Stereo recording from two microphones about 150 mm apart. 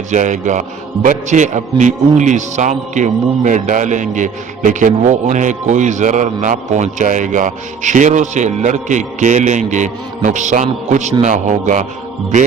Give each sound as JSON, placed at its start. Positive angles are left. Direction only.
{"t": 0.1, "sound": "a man's voice", "side_deg": -55}